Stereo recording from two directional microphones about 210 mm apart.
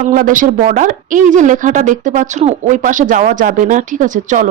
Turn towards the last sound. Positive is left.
turn(degrees=-35)  # may be behind; listen again after turning